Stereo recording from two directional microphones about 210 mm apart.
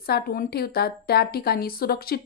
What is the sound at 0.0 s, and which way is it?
A woman's voice, 45° left (ahead or behind).